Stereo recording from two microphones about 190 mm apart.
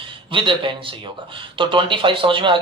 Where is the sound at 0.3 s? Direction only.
25° right (ahead or behind).